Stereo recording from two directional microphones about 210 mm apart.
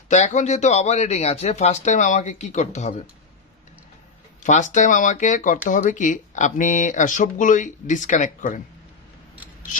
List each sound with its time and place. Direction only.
0.1 s speech: 35° left (ahead or behind)
4.4 s speech: 35° left (ahead or behind)